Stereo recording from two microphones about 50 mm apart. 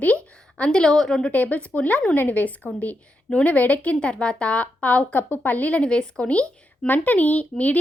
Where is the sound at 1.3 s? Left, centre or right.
Left.